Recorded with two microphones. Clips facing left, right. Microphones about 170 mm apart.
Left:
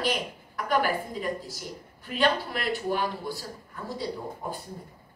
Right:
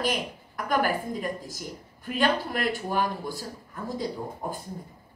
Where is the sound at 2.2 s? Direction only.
45° right (ahead or behind).